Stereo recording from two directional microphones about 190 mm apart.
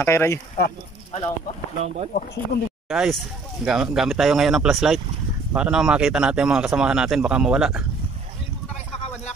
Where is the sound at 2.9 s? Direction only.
Centre (ahead or behind).